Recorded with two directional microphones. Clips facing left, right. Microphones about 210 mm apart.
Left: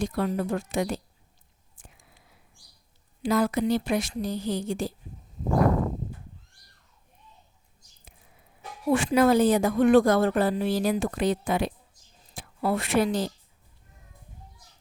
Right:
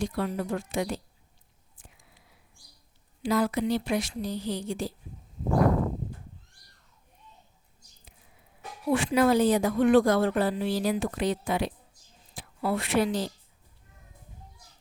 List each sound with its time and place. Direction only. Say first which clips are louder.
0.0 s speech: left 3 dB; 45° left (ahead or behind)
3.2 s speech: left 2 dB; 45° left (ahead or behind)
8.9 s a woman's voice: left 2 dB; 45° left (ahead or behind)